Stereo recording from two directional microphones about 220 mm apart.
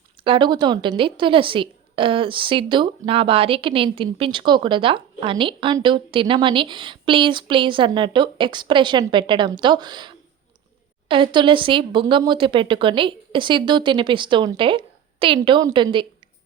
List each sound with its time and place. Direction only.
0.3 s a woman's voice: 20° right (ahead or behind)